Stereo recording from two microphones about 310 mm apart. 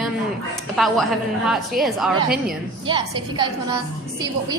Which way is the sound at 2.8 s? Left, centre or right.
Centre.